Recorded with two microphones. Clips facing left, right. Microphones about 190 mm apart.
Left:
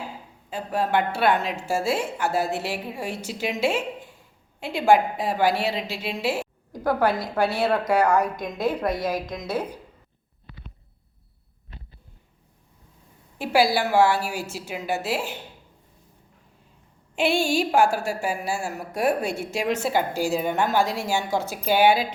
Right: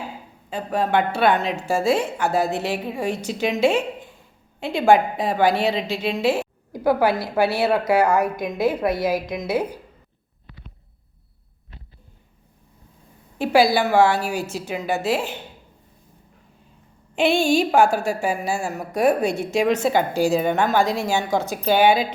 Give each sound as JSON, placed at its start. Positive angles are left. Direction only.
{"t": 0.5, "sound": "a woman's voice", "side_deg": 5}
{"t": 6.7, "sound": "a woman's voice", "side_deg": -5}
{"t": 13.4, "sound": "a woman's voice", "side_deg": 5}
{"t": 17.2, "sound": "a woman's voice", "side_deg": 10}
{"t": 21.0, "sound": "a woman's voice", "side_deg": -15}
{"t": 21.5, "sound": "a woman's voice", "side_deg": 10}